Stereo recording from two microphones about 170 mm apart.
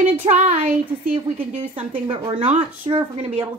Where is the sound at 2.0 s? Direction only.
30° right (ahead or behind).